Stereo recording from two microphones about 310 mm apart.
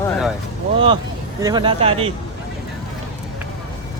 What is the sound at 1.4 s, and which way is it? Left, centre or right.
Speech, centre.